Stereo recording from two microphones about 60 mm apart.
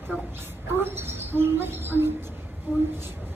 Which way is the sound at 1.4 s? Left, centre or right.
Right.